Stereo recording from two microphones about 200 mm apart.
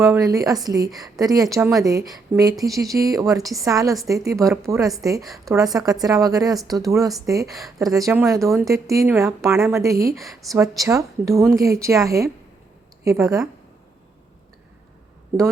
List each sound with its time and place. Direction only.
0.0 s a woman's voice: 15° right (ahead or behind)